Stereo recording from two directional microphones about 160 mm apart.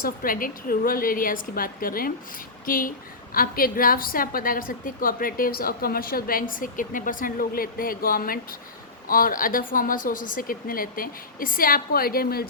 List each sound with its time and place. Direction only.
0.0 s a woman's voice: 65° left (ahead or behind)